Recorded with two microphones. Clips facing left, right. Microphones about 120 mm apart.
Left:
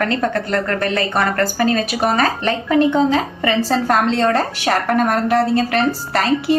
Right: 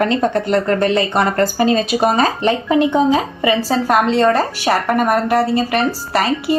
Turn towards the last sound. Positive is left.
turn(degrees=-5)  # may be behind; listen again after turning